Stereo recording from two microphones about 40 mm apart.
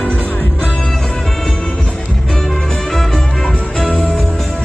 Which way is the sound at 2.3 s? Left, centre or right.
Centre.